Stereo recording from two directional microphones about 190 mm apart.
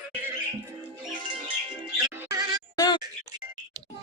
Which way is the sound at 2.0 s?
15° right (ahead or behind).